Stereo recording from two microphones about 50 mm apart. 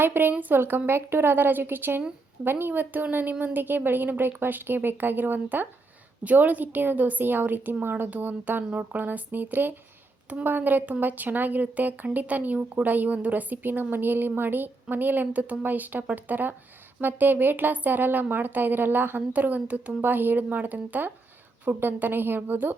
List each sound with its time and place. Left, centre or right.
0.0 s speech: right
0.9 s a woman's voice: right
20.0 s a woman's voice: right